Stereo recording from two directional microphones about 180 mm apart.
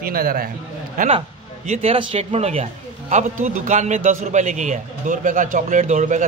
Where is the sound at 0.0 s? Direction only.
55° right (ahead or behind).